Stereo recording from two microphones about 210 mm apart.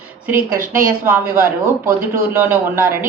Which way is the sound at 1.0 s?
10° right (ahead or behind).